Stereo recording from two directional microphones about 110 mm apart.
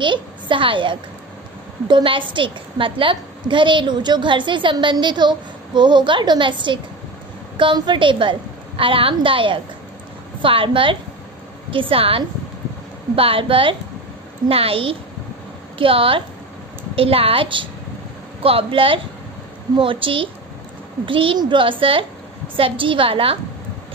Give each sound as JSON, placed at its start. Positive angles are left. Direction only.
{"t": 0.0, "sound": "a woman's voice", "side_deg": -50}